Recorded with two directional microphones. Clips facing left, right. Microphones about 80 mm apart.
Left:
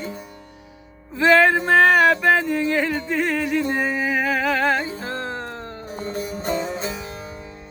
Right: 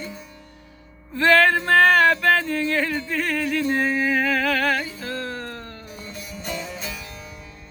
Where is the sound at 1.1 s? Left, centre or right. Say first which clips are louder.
Left 2 dB; centre.